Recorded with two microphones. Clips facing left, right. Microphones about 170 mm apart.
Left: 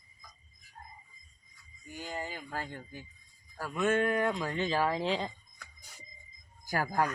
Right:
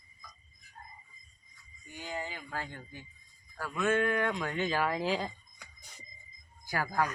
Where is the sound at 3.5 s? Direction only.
10° left (ahead or behind).